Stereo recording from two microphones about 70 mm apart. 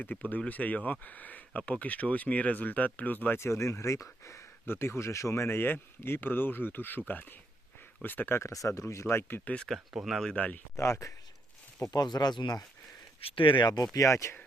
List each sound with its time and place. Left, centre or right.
0.0 s speech: left
3.3 s speech: left
8.4 s speech: left
9.4 s speech: left
9.9 s speech: centre
10.3 s speech: left
10.8 s speech: left
11.9 s speech: left
13.6 s speech: left
13.9 s speech: left